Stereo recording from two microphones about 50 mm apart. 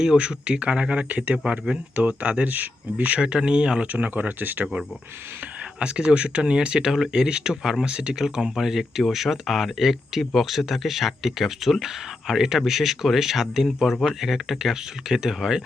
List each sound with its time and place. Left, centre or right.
0.0 s speech: centre
2.0 s speech: right
3.2 s speech: centre
3.9 s speech: right
5.8 s speech: right